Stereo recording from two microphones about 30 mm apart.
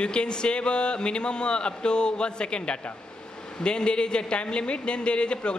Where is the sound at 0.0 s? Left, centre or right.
Left.